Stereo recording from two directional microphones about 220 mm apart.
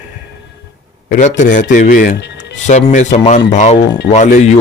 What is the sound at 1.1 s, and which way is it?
A man's voice, 35° left (ahead or behind).